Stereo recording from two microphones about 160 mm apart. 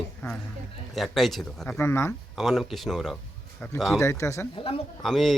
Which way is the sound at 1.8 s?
15° left (ahead or behind).